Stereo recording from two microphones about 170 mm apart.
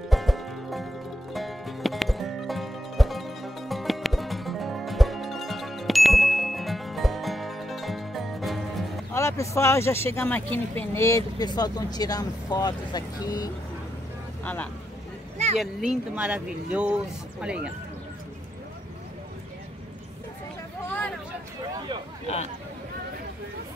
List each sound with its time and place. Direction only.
0.1 s music: centre (ahead or behind)
9.1 s speech: 15° left (ahead or behind)
14.4 s speech: 10° left (ahead or behind)
15.3 s a sound: 40° right (ahead or behind)
15.6 s speech: 5° right (ahead or behind)
20.8 s vehicle: 10° left (ahead or behind)